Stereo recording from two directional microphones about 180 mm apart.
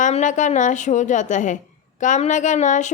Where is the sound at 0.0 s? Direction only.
40° left (ahead or behind).